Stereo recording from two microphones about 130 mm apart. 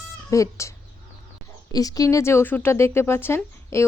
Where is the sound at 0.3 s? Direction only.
25° left (ahead or behind).